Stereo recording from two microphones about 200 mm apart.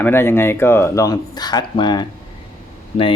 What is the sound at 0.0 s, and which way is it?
Speech, 10° left (ahead or behind).